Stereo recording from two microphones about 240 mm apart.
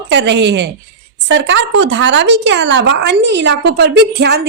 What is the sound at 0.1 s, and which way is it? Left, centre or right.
Speech, right.